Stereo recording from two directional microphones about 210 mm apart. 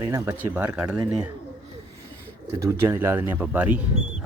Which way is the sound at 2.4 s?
15° right (ahead or behind).